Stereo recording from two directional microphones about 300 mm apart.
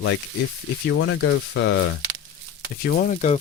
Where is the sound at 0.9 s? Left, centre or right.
Left.